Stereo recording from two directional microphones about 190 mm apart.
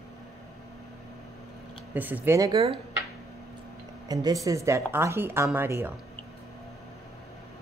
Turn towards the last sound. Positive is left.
turn(degrees=-10)  # may be behind; listen again after turning